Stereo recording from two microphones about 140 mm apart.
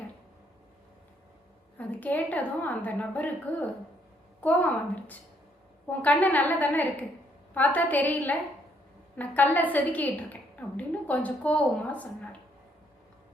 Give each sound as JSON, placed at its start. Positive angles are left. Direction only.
{"t": 1.8, "sound": "a woman's voice", "side_deg": 10}